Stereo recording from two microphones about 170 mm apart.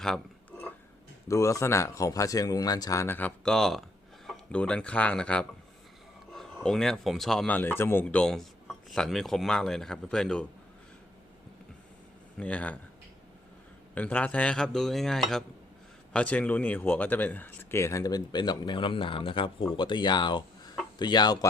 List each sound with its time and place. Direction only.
0.0 s a sound: 5° left (ahead or behind)
1.3 s speech: 20° left (ahead or behind)
12.4 s speech: 5° left (ahead or behind)
13.9 s speech: 10° left (ahead or behind); by 21.3 s 25° left (ahead or behind)